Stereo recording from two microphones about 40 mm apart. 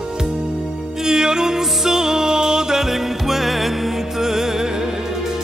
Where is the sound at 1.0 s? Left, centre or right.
Centre.